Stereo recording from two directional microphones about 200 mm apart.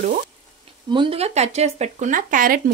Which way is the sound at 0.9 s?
25° right (ahead or behind).